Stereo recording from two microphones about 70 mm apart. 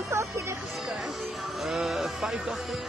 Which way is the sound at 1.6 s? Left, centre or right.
Centre.